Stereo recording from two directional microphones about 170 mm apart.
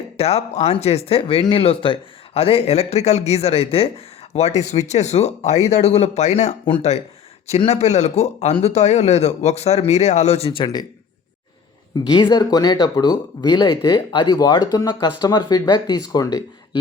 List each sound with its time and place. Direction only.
0.2 s speech: 40° left (ahead or behind)
12.1 s speech: 25° left (ahead or behind)